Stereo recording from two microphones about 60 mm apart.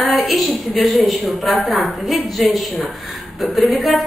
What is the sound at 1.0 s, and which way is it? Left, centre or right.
A woman's voice, centre.